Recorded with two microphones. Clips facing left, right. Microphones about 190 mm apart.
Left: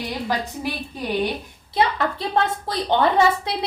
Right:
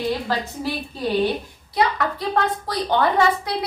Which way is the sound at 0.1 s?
15° left (ahead or behind).